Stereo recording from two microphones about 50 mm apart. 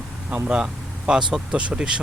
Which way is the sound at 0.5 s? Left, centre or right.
Centre.